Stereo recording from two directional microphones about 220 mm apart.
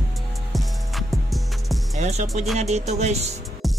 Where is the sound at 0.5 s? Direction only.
Centre (ahead or behind).